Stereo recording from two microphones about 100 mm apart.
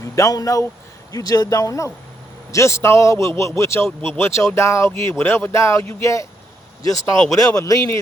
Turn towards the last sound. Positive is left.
turn(degrees=35)  # may be behind; listen again after turning